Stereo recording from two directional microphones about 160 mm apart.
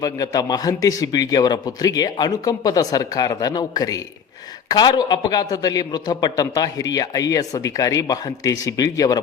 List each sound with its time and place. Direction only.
0.0 s a man's voice: 25° left (ahead or behind)